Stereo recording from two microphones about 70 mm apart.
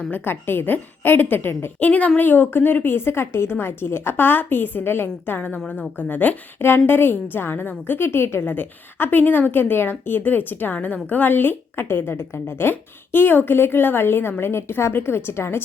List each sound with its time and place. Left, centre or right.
0.0 s a woman's voice: left